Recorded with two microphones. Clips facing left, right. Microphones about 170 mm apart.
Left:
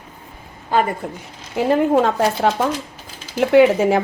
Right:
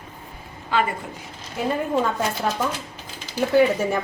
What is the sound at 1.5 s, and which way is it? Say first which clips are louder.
A woman's voice: left 7 dB; 80° left.